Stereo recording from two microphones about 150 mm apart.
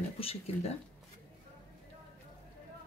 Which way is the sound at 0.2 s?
40° left (ahead or behind).